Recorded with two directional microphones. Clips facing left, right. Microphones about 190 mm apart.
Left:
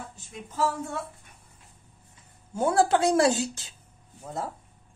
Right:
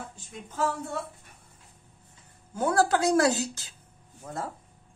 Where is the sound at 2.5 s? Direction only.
25° left (ahead or behind).